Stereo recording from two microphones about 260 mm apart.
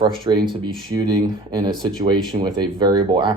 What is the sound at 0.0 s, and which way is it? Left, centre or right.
Speech, centre.